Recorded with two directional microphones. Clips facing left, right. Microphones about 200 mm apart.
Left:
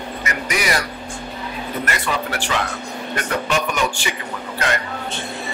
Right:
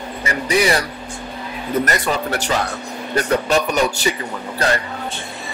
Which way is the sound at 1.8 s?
40° right (ahead or behind).